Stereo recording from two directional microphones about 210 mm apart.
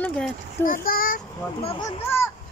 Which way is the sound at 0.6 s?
40° left (ahead or behind).